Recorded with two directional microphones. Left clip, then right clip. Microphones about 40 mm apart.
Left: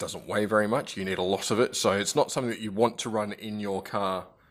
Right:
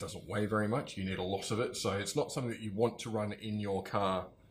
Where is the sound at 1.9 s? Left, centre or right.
Left.